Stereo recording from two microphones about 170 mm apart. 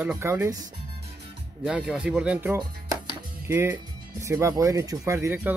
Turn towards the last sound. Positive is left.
turn(degrees=-10)  # may be behind; listen again after turning